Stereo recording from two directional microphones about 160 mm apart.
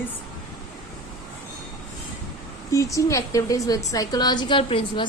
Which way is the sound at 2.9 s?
20° left (ahead or behind).